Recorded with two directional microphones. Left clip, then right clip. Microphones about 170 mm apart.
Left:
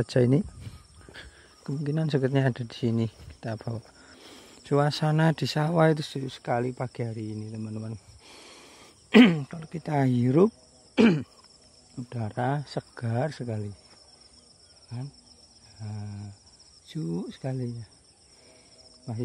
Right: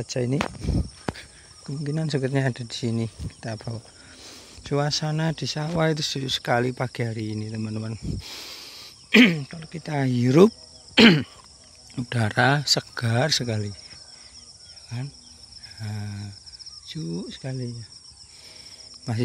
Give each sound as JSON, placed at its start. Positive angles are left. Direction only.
{"t": 0.0, "sound": "speech", "side_deg": 30}
{"t": 1.7, "sound": "speech", "side_deg": 15}
{"t": 9.1, "sound": "speech", "side_deg": 25}
{"t": 10.2, "sound": "speech", "side_deg": 0}
{"t": 14.9, "sound": "speech", "side_deg": 5}
{"t": 16.8, "sound": "speech", "side_deg": 20}
{"t": 19.1, "sound": "speech", "side_deg": -10}